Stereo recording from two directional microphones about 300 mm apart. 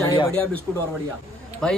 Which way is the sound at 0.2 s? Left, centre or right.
Centre.